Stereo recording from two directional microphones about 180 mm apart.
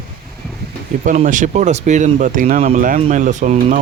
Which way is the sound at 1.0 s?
45° right (ahead or behind).